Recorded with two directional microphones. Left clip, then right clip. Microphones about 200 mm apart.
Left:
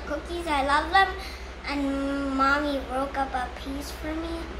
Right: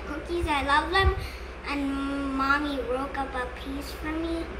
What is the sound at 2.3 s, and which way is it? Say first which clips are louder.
Speech: left 2 dB; 15° left (ahead or behind).